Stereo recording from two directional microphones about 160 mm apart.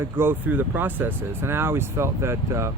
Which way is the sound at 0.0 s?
15° right (ahead or behind).